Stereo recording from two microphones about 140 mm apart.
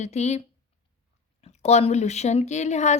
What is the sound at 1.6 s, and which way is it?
Speech, 50° left (ahead or behind).